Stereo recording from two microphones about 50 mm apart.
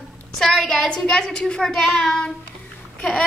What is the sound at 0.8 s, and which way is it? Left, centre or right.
A child's voice, centre.